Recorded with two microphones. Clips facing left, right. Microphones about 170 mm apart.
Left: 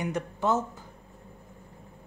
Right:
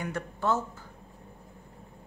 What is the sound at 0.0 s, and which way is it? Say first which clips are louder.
Speech: left 2 dB; 20° left (ahead or behind).